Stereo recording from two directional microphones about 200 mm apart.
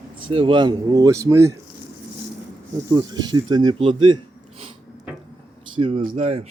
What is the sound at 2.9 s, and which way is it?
Speech, 20° right (ahead or behind).